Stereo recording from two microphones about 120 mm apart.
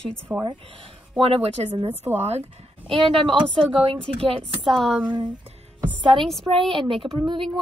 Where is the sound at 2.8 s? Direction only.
45° right (ahead or behind).